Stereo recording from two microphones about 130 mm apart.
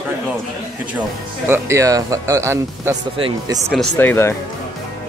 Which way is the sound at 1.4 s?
20° right (ahead or behind).